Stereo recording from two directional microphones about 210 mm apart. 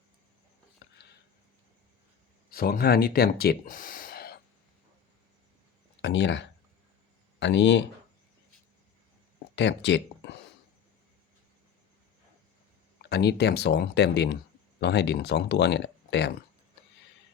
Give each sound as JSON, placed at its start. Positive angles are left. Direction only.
{"t": 2.5, "sound": "speech", "side_deg": 45}
{"t": 6.0, "sound": "speech", "side_deg": 60}
{"t": 9.6, "sound": "speech", "side_deg": 55}
{"t": 13.0, "sound": "speech", "side_deg": 50}